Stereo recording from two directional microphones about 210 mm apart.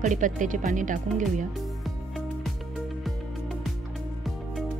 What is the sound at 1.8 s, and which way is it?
Music, centre (ahead or behind).